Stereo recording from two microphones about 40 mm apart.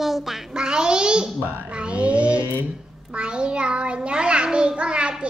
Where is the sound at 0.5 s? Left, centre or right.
Right.